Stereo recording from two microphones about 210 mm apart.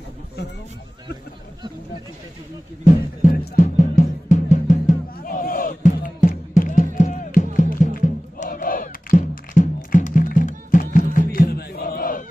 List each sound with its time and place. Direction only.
2.8 s music: 35° left (ahead or behind)